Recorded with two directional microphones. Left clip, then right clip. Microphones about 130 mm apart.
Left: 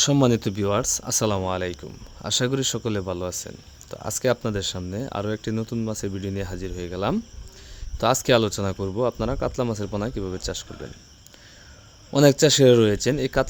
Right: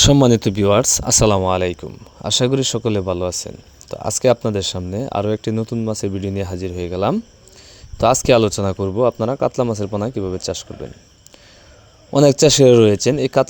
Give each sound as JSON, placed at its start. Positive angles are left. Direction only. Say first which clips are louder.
{"t": 0.0, "sound": "speech", "louder": "right 7 dB", "side_deg": -55}
{"t": 2.2, "sound": "a man's voice", "louder": "right 7 dB", "side_deg": -35}
{"t": 12.1, "sound": "a man's voice", "louder": "right 5 dB", "side_deg": -35}